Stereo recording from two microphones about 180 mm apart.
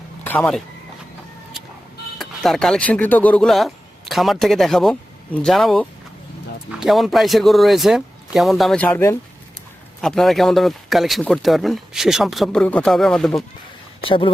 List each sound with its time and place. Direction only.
0.3 s speech: 5° left (ahead or behind)
2.1 s speech: centre (ahead or behind)
10.0 s speech: centre (ahead or behind)
14.0 s speech: 30° left (ahead or behind)